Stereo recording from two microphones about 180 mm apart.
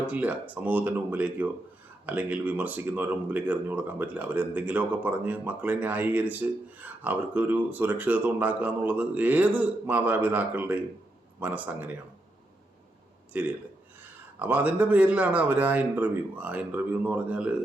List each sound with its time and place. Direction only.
0.1 s speech: 10° right (ahead or behind)
13.3 s speech: 10° right (ahead or behind)